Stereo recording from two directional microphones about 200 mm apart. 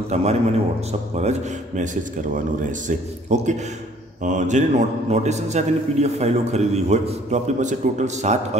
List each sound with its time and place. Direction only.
0.1 s a man's voice: 35° right (ahead or behind)